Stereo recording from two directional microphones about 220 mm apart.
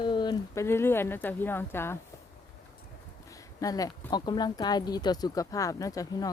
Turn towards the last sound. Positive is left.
turn(degrees=15)  # may be behind; listen again after turning